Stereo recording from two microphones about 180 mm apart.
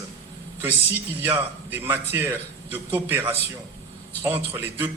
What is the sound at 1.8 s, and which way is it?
A man's voice, 10° right (ahead or behind).